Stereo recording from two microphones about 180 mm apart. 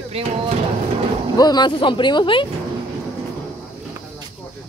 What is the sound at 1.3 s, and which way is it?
Speech, 20° left (ahead or behind).